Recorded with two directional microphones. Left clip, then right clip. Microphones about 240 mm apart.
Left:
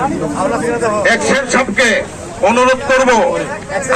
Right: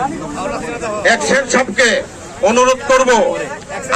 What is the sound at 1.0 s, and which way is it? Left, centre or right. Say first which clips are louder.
A man's voice: right 3 dB; right.